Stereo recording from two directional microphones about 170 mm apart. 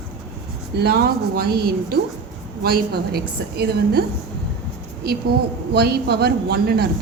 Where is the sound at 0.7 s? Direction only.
70° right (ahead or behind).